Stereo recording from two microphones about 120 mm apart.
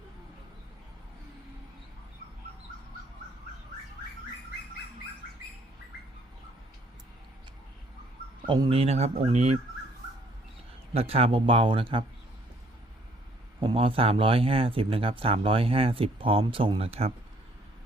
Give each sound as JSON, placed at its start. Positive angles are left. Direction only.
{"t": 8.4, "sound": "speech", "side_deg": -30}
{"t": 8.7, "sound": "speech", "side_deg": -60}
{"t": 10.9, "sound": "speech", "side_deg": -55}
{"t": 13.6, "sound": "speech", "side_deg": -50}